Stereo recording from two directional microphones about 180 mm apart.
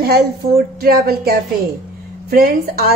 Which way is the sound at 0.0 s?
55° right (ahead or behind).